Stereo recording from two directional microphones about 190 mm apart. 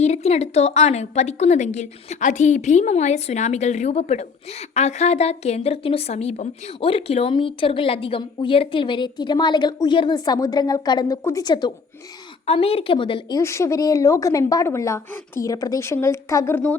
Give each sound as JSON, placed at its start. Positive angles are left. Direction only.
{"t": 0.0, "sound": "a woman's voice", "side_deg": 35}
{"t": 13.4, "sound": "a woman's voice", "side_deg": 15}